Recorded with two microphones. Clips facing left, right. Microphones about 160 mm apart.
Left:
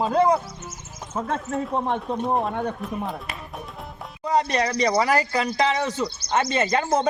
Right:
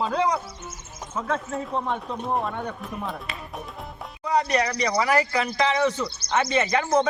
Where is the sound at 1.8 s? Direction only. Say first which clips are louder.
Left 3 dB; 20° left (ahead or behind).